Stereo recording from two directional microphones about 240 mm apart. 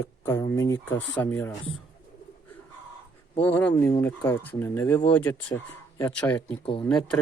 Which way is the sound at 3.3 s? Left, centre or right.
Centre.